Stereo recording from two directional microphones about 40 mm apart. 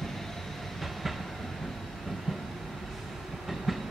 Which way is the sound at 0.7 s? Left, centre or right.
Centre.